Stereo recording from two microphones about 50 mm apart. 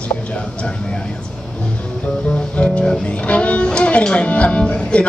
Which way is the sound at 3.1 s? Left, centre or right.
Left.